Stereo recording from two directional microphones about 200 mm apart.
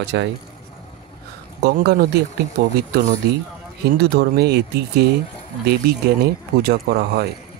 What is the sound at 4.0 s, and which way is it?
Speech, 55° right (ahead or behind).